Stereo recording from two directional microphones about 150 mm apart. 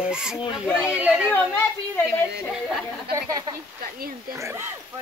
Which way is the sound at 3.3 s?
25° right (ahead or behind).